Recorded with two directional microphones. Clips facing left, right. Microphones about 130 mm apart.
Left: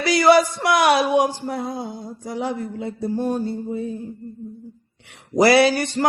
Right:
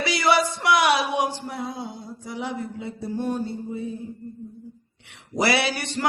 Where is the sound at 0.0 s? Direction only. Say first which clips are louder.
Left 6 dB; 45° left (ahead or behind).